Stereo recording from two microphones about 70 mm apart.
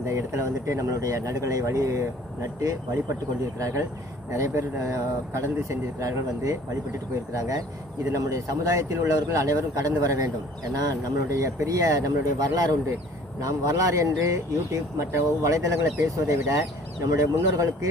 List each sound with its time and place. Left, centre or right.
0.0 s speech: right